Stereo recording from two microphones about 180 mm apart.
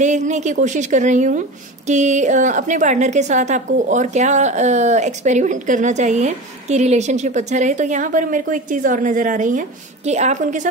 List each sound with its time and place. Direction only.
0.0 s a woman's voice: 40° right (ahead or behind)